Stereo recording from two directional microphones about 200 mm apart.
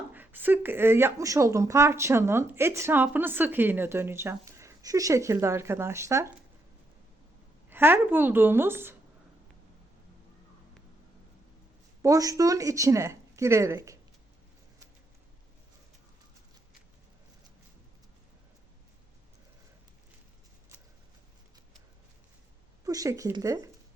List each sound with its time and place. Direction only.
0.1 s speech: 10° right (ahead or behind)
7.7 s speech: 10° right (ahead or behind)
12.0 s speech: 15° right (ahead or behind)
22.8 s speech: 15° right (ahead or behind)